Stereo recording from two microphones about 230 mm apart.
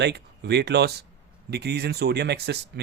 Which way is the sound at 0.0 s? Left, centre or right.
Right.